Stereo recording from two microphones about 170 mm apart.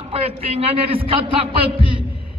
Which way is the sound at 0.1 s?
35° right (ahead or behind).